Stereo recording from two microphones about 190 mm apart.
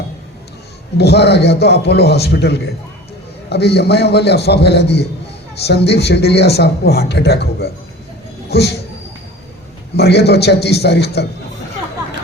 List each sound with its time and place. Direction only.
0.9 s speech: 60° left (ahead or behind)
9.9 s speech: 60° left (ahead or behind)